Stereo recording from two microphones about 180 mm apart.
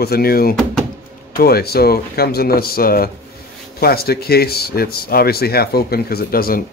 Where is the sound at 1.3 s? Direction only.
60° left (ahead or behind).